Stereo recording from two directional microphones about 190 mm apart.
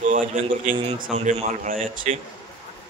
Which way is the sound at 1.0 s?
40° right (ahead or behind).